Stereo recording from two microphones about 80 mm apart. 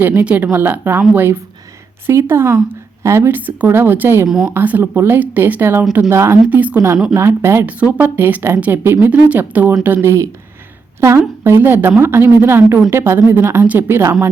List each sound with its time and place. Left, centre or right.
0.0 s a woman's voice: right
6.5 s a woman's voice: centre
6.7 s speech: right
7.7 s a woman's voice: centre